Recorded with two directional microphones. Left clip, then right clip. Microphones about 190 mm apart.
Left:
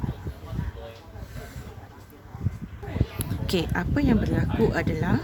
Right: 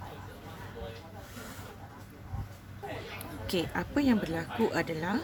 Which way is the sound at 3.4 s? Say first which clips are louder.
Left 5 dB; 40° left (ahead or behind).